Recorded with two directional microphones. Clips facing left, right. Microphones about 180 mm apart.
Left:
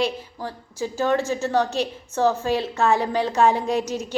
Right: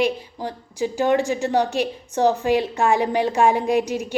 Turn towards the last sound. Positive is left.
turn(degrees=-15)  # may be behind; listen again after turning